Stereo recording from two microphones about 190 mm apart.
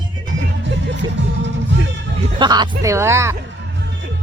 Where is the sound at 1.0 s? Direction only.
25° right (ahead or behind).